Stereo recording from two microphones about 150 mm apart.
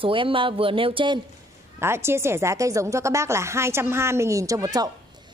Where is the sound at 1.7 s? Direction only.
15° right (ahead or behind).